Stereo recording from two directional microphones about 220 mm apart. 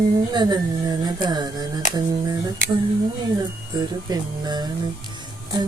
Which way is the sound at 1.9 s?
15° right (ahead or behind).